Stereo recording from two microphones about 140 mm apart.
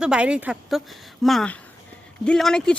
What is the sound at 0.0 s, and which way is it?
Speech, 5° right (ahead or behind).